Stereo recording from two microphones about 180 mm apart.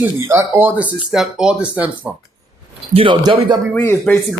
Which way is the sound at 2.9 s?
30° right (ahead or behind).